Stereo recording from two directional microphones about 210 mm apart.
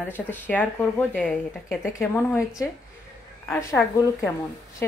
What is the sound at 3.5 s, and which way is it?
Speech, 15° left (ahead or behind).